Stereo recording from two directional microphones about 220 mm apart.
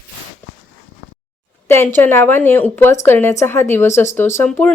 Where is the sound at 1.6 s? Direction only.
10° left (ahead or behind).